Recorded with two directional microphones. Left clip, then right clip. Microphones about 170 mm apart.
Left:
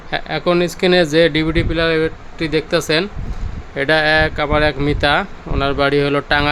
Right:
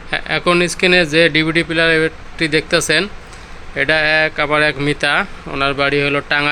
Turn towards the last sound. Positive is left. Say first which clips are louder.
# even
turn(degrees=20)  # may be behind; listen again after turning